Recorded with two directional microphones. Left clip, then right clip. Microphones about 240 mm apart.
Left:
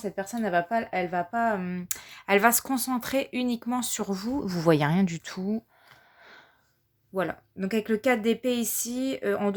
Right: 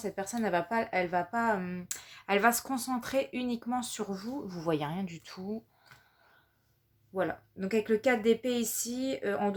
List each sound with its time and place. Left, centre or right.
0.0 s speech: left
7.1 s speech: left